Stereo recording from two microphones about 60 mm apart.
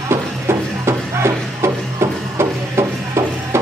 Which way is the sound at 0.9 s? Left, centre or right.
Right.